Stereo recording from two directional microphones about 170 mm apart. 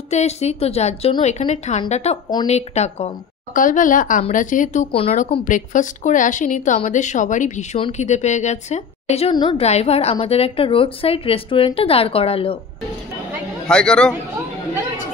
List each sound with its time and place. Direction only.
0.1 s a woman's voice: 40° left (ahead or behind)
3.5 s speech: 50° left (ahead or behind)
9.3 s a woman's voice: 25° left (ahead or behind)
13.7 s a man's voice: 5° left (ahead or behind)